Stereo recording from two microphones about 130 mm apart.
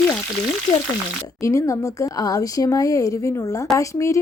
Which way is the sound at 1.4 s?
25° left (ahead or behind).